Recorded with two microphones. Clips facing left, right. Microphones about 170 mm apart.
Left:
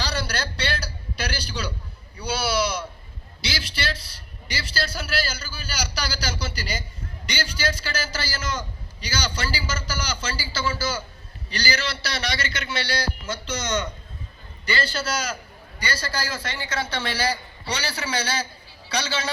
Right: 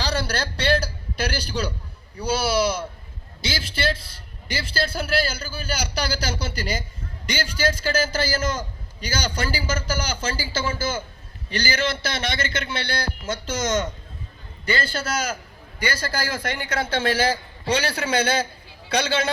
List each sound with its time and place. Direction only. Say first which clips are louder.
0.0 s a man's voice: right 3 dB; 45° right (ahead or behind)